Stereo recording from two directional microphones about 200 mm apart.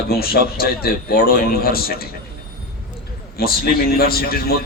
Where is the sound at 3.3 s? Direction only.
50° left (ahead or behind).